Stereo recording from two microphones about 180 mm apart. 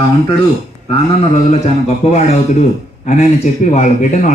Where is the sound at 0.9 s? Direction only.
35° left (ahead or behind).